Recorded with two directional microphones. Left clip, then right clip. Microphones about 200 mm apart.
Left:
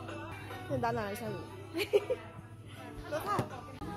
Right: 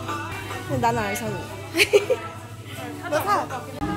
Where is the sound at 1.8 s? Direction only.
Centre (ahead or behind).